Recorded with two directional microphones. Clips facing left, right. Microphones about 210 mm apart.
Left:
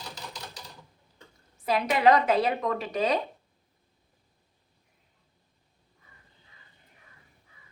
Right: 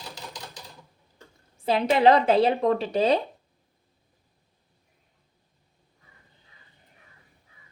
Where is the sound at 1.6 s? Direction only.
30° right (ahead or behind).